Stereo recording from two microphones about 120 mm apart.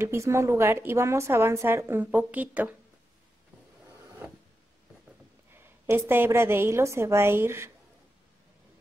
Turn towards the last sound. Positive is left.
turn(degrees=-20)  # may be behind; listen again after turning